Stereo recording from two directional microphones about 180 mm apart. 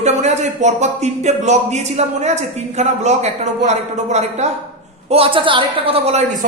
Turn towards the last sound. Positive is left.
turn(degrees=-35)  # may be behind; listen again after turning